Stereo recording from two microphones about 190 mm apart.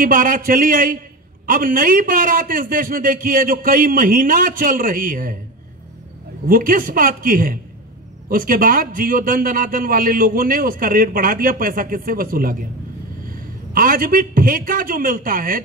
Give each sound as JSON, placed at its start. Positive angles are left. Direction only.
{"t": 0.0, "sound": "a man's voice", "side_deg": -45}
{"t": 6.5, "sound": "a man's voice", "side_deg": -45}
{"t": 13.7, "sound": "a man's voice", "side_deg": -50}